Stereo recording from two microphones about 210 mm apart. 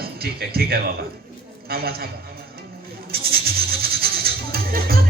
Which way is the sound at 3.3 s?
45° right (ahead or behind).